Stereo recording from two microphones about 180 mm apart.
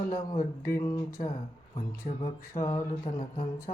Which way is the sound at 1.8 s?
45° left (ahead or behind).